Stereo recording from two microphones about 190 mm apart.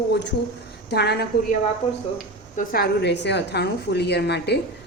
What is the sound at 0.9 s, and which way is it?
Speech, 60° left (ahead or behind).